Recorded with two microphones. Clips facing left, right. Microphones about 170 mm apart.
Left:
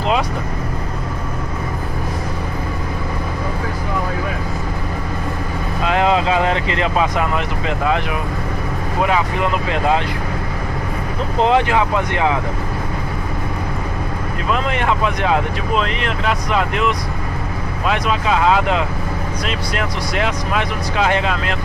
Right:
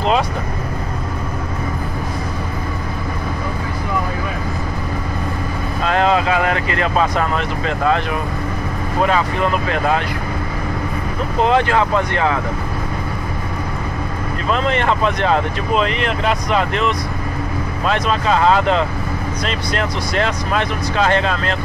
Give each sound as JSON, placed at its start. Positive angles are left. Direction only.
{"t": 5.9, "sound": "speech", "side_deg": 15}
{"t": 7.0, "sound": "speech", "side_deg": 10}
{"t": 9.0, "sound": "speech", "side_deg": 15}
{"t": 11.4, "sound": "speech", "side_deg": 15}
{"t": 14.5, "sound": "speech", "side_deg": 5}